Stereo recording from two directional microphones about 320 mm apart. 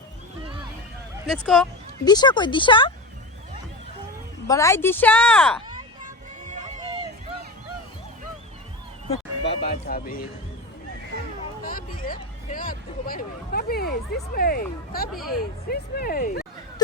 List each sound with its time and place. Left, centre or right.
1.3 s speech: centre
2.0 s speech: centre
4.4 s speech: centre
6.5 s a sound: centre
9.4 s speech: left
11.6 s speech: left
15.1 s speech: centre
15.7 s speech: left